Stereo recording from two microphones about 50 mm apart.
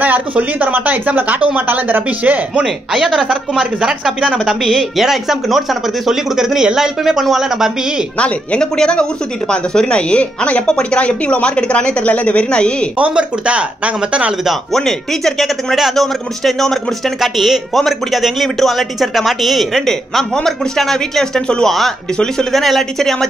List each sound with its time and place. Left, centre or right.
0.4 s speech: right
2.6 s speech: centre
3.1 s speech: right
4.6 s speech: centre
8.2 s speech: centre
12.9 s speech: right
14.7 s speech: centre